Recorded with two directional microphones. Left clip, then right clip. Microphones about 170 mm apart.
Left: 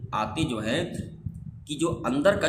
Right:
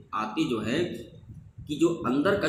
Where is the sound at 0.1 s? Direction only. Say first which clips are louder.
Even; 55° left (ahead or behind).